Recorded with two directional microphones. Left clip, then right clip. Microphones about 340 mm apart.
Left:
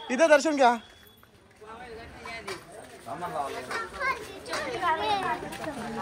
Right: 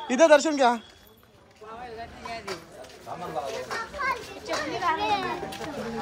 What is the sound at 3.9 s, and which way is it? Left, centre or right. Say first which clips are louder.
Children playing: right 2 dB; right.